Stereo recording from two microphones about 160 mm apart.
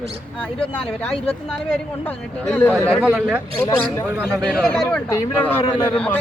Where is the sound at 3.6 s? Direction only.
10° left (ahead or behind).